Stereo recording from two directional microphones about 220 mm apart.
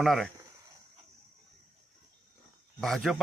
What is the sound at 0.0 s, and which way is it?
Speech, centre (ahead or behind).